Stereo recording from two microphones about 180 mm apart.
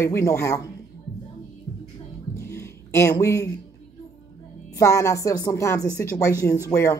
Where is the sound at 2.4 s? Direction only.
15° left (ahead or behind).